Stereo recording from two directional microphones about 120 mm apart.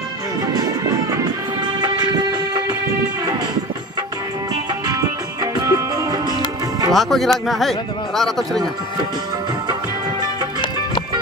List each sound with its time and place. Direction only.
4.8 s music: 35° right (ahead or behind)
6.9 s speech: centre (ahead or behind)